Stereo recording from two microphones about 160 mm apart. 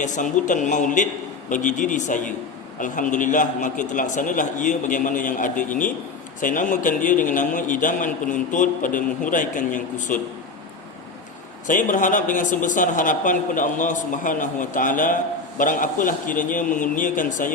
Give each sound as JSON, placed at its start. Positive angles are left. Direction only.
{"t": 0.0, "sound": "a man's voice", "side_deg": 50}
{"t": 11.7, "sound": "a man's voice", "side_deg": 55}